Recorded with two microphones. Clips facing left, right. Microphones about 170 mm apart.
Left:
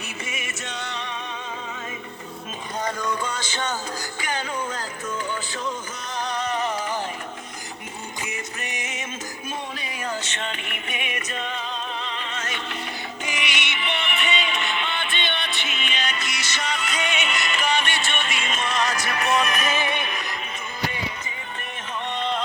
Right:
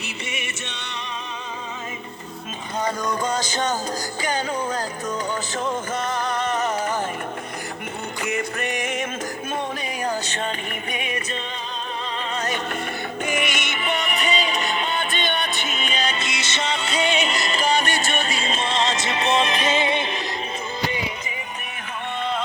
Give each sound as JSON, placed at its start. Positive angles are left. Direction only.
{"t": 2.8, "sound": "music", "side_deg": -40}
{"t": 5.5, "sound": "music", "side_deg": -50}
{"t": 8.2, "sound": "music", "side_deg": -60}
{"t": 10.0, "sound": "music", "side_deg": -35}
{"t": 12.3, "sound": "music", "side_deg": -40}
{"t": 13.2, "sound": "music", "side_deg": -50}
{"t": 22.2, "sound": "music", "side_deg": -5}